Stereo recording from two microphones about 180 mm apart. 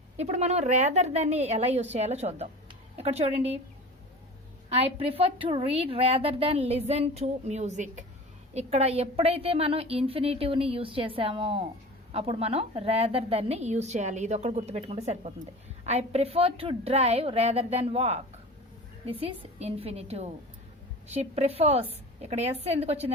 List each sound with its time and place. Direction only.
0.2 s a woman's voice: 35° right (ahead or behind)
4.7 s a woman's voice: 35° right (ahead or behind)